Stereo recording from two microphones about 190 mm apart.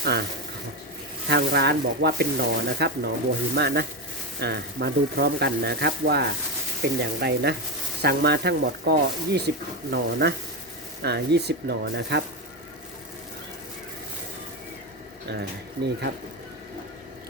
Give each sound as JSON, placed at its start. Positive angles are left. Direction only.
{"t": 0.0, "sound": "speech", "side_deg": -60}
{"t": 1.3, "sound": "speech", "side_deg": -60}